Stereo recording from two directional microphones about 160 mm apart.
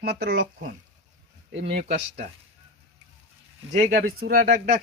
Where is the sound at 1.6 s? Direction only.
40° right (ahead or behind).